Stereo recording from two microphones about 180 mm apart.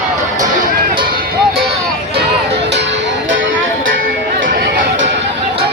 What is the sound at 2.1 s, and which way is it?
Music, 65° right (ahead or behind).